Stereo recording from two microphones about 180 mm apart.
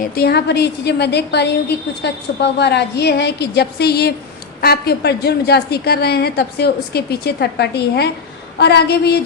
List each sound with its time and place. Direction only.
0.0 s a woman's voice: 60° left (ahead or behind)